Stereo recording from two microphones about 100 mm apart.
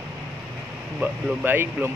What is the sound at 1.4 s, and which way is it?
Speech, 20° right (ahead or behind).